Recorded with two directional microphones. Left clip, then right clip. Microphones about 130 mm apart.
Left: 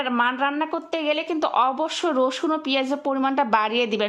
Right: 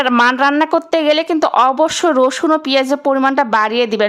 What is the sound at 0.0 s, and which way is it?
Speech, 40° right (ahead or behind).